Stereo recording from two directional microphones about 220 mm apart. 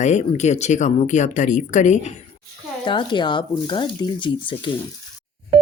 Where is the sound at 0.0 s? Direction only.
30° left (ahead or behind).